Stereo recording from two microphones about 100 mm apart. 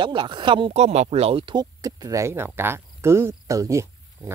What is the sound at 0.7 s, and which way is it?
Speech, 90° right.